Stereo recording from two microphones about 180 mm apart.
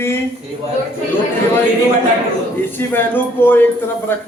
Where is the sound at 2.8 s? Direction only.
10° left (ahead or behind).